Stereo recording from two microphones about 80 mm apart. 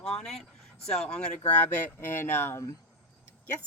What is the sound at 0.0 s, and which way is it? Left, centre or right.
Speech, centre.